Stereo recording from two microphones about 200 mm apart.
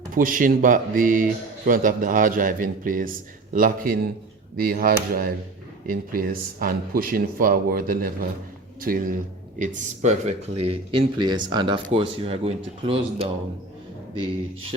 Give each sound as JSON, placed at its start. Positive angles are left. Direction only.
{"t": 0.1, "sound": "speech", "side_deg": -45}
{"t": 9.6, "sound": "speech", "side_deg": -35}